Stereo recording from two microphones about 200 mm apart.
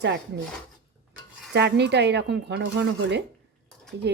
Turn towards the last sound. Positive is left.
turn(degrees=-60)  # may be behind; listen again after turning